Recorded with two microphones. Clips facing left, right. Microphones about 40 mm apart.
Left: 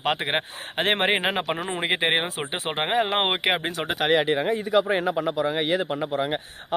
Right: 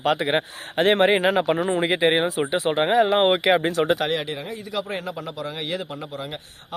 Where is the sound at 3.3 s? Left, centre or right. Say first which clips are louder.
Right 5 dB; left.